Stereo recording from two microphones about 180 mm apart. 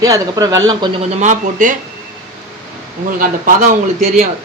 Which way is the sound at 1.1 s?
40° right (ahead or behind).